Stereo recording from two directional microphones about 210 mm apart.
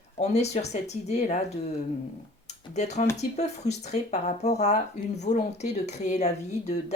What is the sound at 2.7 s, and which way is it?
Speech, 35° left (ahead or behind).